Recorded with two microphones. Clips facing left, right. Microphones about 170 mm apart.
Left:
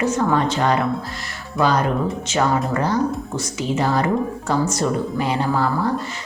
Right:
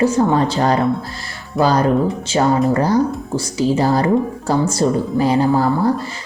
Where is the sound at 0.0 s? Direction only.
30° right (ahead or behind).